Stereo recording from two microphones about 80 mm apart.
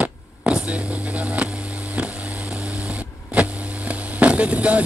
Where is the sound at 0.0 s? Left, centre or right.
Centre.